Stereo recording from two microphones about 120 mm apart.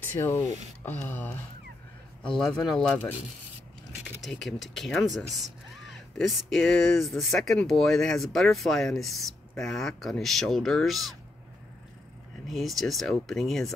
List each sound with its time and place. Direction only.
0.2 s speech: 20° left (ahead or behind)
2.2 s speech: 5° left (ahead or behind)
4.2 s speech: centre (ahead or behind)
12.4 s speech: centre (ahead or behind)